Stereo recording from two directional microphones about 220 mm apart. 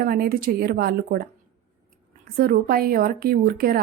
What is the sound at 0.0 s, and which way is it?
Speech, 45° right (ahead or behind).